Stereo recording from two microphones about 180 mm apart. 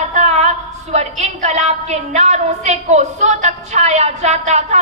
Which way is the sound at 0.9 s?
40° right (ahead or behind).